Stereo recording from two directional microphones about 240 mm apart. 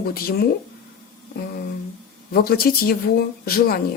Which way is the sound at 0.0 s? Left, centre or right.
Left.